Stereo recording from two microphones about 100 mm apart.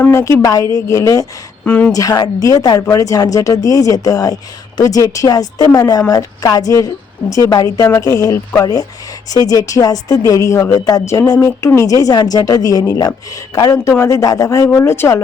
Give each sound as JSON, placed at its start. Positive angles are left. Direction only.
{"t": 0.0, "sound": "speech", "side_deg": 25}
{"t": 1.6, "sound": "a woman's voice", "side_deg": 15}
{"t": 1.9, "sound": "speech", "side_deg": 35}